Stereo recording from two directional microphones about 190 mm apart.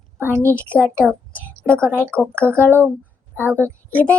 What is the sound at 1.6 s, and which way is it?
Speech, 15° right (ahead or behind).